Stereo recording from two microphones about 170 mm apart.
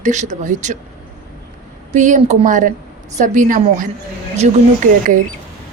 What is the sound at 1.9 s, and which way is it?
Speech, 45° right (ahead or behind).